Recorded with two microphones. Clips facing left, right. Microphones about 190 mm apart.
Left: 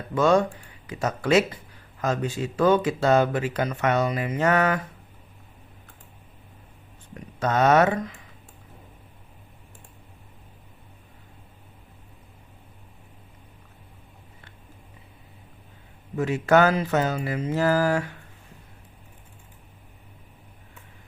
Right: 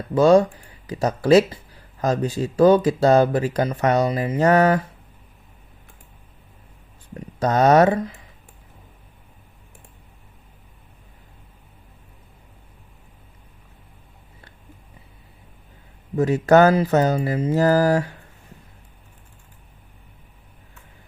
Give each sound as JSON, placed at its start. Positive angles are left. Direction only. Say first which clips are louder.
{"t": 0.1, "sound": "speech", "louder": "right 6 dB", "side_deg": -35}
{"t": 7.1, "sound": "speech", "louder": "right 4 dB", "side_deg": -35}
{"t": 16.1, "sound": "speech", "louder": "right 5 dB", "side_deg": -40}